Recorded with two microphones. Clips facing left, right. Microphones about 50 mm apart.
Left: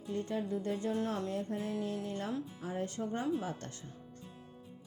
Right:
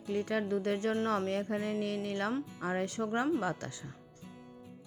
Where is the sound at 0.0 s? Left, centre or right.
Right.